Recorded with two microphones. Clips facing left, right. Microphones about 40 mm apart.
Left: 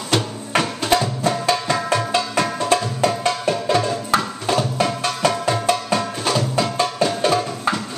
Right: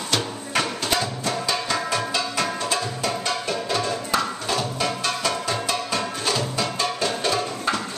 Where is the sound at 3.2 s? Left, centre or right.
Left.